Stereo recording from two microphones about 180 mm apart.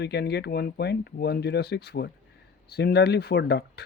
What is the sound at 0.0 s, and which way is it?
Speech, 70° left (ahead or behind).